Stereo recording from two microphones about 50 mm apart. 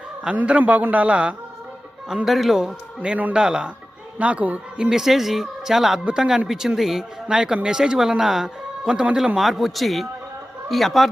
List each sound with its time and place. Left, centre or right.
0.4 s a man's voice: right
2.2 s speech: centre
2.6 s speech: centre
4.2 s a man's voice: right
4.8 s speech: centre
7.3 s speech: centre